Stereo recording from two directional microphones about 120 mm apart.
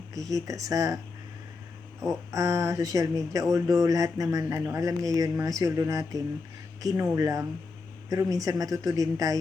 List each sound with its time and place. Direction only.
0.1 s speech: 30° right (ahead or behind)
2.0 s speech: 25° right (ahead or behind)